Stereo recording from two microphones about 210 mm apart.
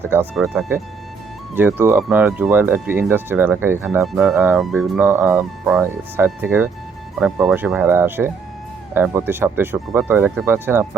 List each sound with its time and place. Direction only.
0.1 s speech: 5° right (ahead or behind)
1.5 s speech: 10° right (ahead or behind)
4.0 s speech: centre (ahead or behind)